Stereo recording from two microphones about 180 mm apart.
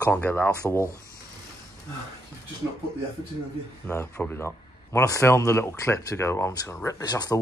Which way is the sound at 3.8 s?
10° left (ahead or behind).